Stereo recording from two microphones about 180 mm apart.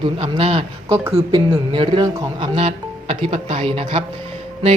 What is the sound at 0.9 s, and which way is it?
Speech, 15° right (ahead or behind).